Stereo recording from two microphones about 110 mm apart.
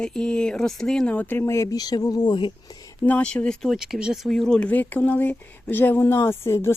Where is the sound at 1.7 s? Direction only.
35° left (ahead or behind).